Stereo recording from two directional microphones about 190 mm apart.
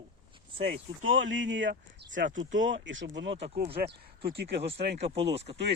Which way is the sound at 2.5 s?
85° right.